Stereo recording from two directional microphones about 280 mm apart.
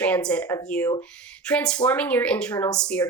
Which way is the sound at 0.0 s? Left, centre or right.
Centre.